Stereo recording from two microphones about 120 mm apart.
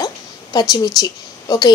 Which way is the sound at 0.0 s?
30° left (ahead or behind).